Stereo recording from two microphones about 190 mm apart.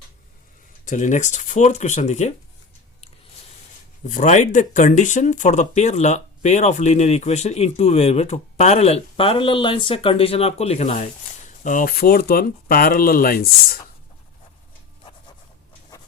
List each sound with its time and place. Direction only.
0.9 s speech: 40° left (ahead or behind)
4.0 s speech: 40° left (ahead or behind)